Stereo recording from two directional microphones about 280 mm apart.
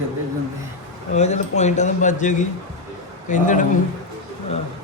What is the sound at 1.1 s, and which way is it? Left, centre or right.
A man's voice, left.